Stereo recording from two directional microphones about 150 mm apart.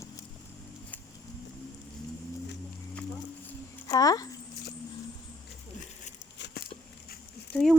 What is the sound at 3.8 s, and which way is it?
Speech, 25° left (ahead or behind).